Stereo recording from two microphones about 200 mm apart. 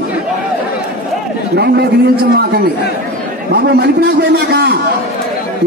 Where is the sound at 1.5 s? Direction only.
55° right (ahead or behind).